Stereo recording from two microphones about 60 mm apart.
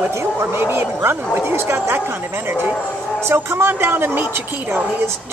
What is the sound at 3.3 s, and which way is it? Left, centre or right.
Speech, right.